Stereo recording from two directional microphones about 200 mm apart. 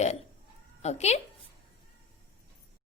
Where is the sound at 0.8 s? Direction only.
35° left (ahead or behind).